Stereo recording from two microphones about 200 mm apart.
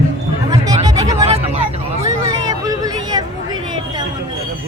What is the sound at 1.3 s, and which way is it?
Vehicle, 30° right (ahead or behind).